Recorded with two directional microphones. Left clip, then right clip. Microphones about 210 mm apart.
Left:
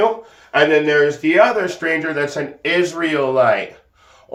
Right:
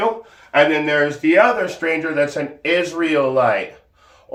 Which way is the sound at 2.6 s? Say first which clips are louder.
Left 1 dB; 20° left (ahead or behind).